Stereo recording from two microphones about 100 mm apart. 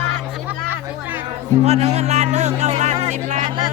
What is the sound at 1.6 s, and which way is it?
Speech, 90° right.